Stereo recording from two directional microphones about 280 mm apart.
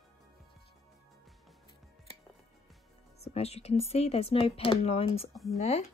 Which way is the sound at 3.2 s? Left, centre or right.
Left.